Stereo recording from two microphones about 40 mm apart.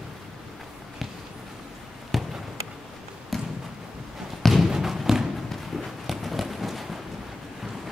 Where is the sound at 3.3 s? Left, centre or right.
Centre.